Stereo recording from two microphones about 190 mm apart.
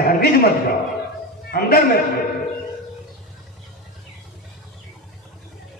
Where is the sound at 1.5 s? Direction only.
50° left (ahead or behind).